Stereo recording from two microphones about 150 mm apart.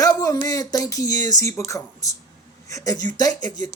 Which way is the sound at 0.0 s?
25° left (ahead or behind).